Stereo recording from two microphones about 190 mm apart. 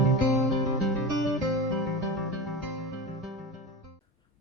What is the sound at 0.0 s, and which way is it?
Music, centre (ahead or behind).